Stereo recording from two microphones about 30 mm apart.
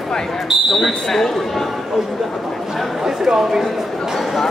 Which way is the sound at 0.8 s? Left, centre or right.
Centre.